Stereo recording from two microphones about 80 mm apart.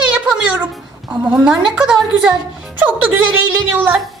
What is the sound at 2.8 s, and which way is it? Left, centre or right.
Speech, centre.